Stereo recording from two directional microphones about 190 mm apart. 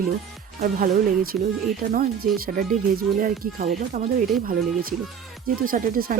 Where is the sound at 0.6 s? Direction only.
50° right (ahead or behind).